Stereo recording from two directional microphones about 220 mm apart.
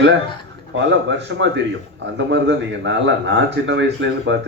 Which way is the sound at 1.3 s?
55° right (ahead or behind).